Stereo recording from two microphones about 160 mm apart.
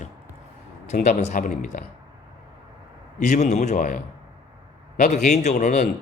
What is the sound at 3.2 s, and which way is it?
Speech, 50° left (ahead or behind).